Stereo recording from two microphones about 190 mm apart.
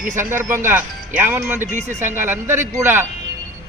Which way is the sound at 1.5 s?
40° right (ahead or behind).